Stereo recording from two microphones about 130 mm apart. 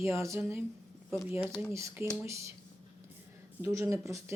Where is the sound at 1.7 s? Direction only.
20° right (ahead or behind).